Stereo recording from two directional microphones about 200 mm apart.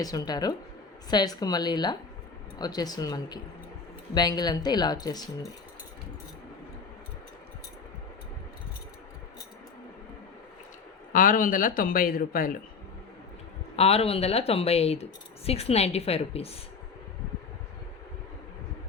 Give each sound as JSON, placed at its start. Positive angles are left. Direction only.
{"t": 0.0, "sound": "speech", "side_deg": 20}
{"t": 11.1, "sound": "speech", "side_deg": 45}
{"t": 13.7, "sound": "speech", "side_deg": 30}